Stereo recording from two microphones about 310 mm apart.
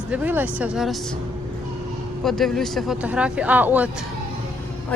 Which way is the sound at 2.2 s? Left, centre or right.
Centre.